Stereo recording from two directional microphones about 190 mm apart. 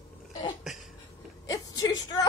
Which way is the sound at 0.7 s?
Centre (ahead or behind).